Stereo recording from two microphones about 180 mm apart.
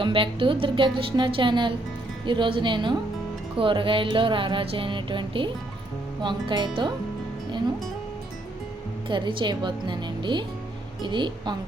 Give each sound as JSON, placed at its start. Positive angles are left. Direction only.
{"t": 0.0, "sound": "music", "side_deg": -30}
{"t": 9.0, "sound": "music", "side_deg": -25}